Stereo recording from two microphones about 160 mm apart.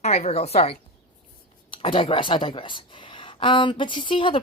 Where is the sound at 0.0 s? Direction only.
45° left (ahead or behind).